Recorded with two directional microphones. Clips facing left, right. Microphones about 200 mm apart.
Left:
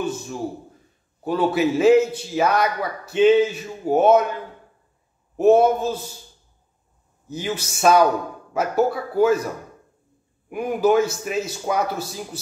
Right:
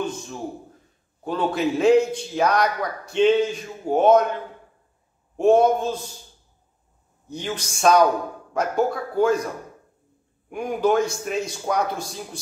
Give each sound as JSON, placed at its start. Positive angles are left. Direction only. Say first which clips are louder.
{"t": 0.0, "sound": "a sound", "louder": "left 2 dB", "side_deg": 5}
{"t": 1.2, "sound": "a man's voice", "louder": "left 3 dB", "side_deg": 5}
{"t": 5.4, "sound": "a man's voice", "louder": "left 2 dB", "side_deg": 5}
{"t": 7.2, "sound": "a man's voice", "louder": "left 2 dB", "side_deg": 5}
{"t": 10.5, "sound": "a man's voice", "louder": "left 2 dB", "side_deg": 5}